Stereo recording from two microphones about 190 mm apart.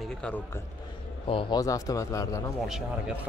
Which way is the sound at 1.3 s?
25° left (ahead or behind).